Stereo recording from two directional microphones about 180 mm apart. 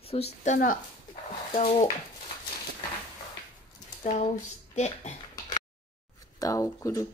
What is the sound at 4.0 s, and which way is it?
A woman's voice, 45° left (ahead or behind).